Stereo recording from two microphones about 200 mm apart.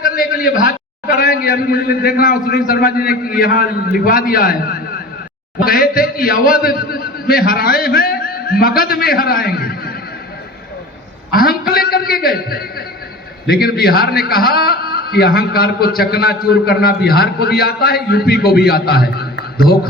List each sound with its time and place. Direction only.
0.0 s a man's voice: 45° left (ahead or behind)
11.3 s a man's voice: 50° left (ahead or behind)